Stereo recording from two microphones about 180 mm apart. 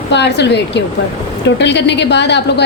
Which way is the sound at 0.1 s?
70° left (ahead or behind).